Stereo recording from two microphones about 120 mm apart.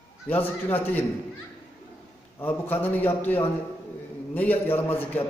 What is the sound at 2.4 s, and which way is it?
A man's voice, 15° left (ahead or behind).